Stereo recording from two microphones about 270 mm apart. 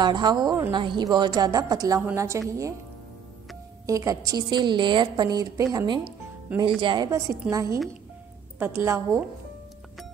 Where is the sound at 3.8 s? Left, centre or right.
Centre.